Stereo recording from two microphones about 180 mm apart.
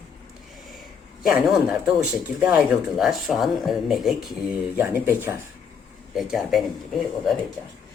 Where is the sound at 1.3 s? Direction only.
5° right (ahead or behind).